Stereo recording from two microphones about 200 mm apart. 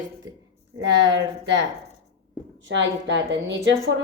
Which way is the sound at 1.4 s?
60° right (ahead or behind).